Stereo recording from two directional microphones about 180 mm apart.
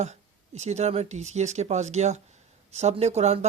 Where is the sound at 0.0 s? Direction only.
40° right (ahead or behind).